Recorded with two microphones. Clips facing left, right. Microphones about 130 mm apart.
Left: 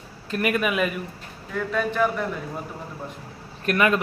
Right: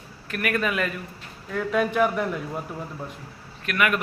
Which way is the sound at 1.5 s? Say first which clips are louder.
Right 2 dB; 5° right (ahead or behind).